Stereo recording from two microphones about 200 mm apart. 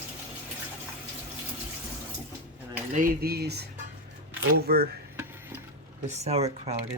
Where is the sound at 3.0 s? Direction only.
50° right (ahead or behind).